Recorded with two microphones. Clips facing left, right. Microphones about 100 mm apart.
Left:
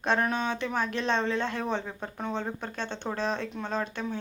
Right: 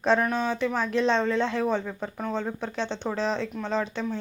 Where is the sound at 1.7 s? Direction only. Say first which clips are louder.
Right 4 dB; 10° left (ahead or behind).